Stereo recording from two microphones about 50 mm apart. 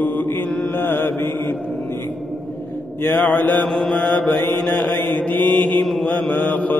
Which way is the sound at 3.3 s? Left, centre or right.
Left.